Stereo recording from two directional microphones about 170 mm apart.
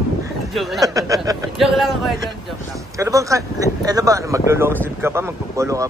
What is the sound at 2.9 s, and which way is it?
Speech, 20° right (ahead or behind).